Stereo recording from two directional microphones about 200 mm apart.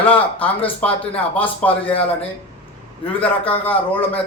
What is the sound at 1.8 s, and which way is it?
Speech, 30° left (ahead or behind).